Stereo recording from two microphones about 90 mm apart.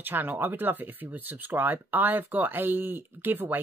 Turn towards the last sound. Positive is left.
turn(degrees=-20)  # may be behind; listen again after turning